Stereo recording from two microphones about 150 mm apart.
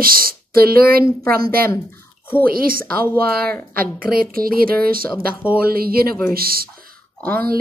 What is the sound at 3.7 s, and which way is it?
Speech, 75° right (ahead or behind).